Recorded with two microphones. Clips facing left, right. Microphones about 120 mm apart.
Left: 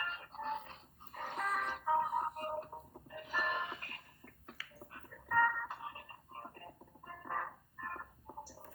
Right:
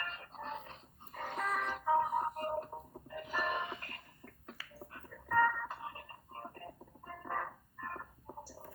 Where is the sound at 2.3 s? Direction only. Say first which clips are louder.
Right 3 dB; 35° right (ahead or behind).